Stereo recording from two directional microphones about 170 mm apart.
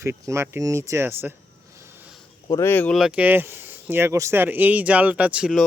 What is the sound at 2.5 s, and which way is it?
Speech, 15° left (ahead or behind).